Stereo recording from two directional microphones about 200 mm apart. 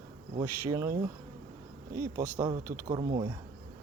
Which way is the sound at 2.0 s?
10° right (ahead or behind).